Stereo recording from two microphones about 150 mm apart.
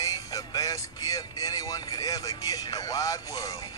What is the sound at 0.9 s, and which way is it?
Speech, 25° left (ahead or behind).